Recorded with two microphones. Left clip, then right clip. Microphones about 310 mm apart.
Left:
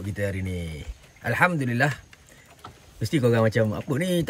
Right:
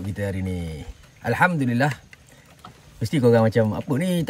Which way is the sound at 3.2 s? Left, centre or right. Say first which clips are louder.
Right 5 dB; right.